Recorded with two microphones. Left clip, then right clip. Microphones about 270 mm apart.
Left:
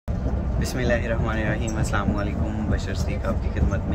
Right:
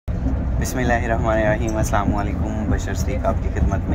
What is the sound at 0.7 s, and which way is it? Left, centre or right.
Speech, centre.